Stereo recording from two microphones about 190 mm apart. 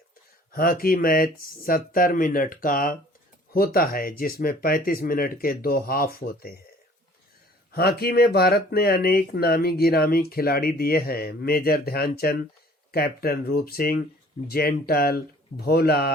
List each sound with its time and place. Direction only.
0.5 s speech: 50° left (ahead or behind)
7.7 s speech: 55° left (ahead or behind)